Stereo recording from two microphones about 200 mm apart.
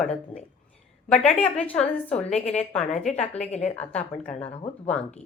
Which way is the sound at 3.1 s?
35° left (ahead or behind).